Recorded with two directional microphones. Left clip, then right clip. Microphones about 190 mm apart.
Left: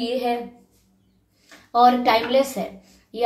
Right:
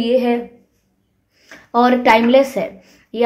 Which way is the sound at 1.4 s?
50° right (ahead or behind).